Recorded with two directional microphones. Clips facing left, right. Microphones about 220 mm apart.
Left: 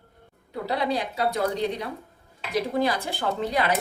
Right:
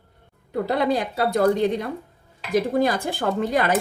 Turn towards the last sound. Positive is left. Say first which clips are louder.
# right 4 dB
turn(degrees=-50)  # may be behind; listen again after turning